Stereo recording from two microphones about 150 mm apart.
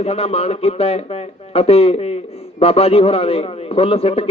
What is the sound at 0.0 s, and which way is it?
A man's voice, 45° left (ahead or behind).